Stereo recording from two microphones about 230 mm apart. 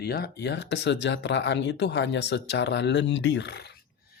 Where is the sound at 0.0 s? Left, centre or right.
Left.